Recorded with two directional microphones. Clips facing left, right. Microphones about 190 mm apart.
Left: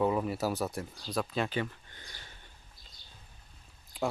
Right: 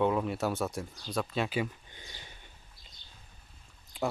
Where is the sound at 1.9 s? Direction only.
15° right (ahead or behind).